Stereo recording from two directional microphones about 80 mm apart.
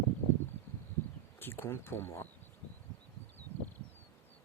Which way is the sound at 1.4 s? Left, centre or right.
Left.